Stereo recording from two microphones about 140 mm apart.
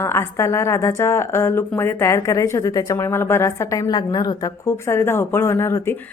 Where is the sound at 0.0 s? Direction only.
20° left (ahead or behind).